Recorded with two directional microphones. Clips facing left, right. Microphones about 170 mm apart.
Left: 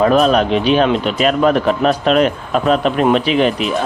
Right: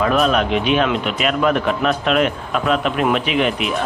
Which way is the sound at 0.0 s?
35° left (ahead or behind).